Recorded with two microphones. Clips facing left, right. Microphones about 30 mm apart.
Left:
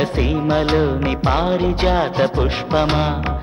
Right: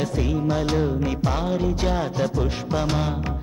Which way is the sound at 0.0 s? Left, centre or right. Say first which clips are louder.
Left 5 dB; left.